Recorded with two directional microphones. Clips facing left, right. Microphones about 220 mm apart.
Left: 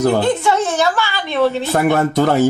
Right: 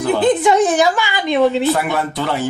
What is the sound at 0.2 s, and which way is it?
A woman's voice, 15° right (ahead or behind).